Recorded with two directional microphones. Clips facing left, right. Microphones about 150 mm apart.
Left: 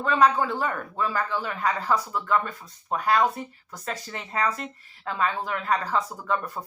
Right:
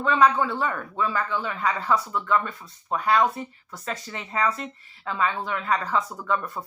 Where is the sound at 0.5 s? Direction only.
40° left (ahead or behind).